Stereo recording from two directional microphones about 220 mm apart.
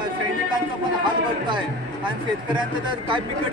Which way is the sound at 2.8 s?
20° right (ahead or behind).